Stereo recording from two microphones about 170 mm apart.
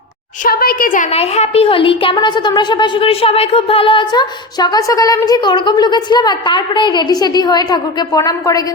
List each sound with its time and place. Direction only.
0.4 s a woman's voice: 60° left (ahead or behind); by 8.6 s 20° left (ahead or behind)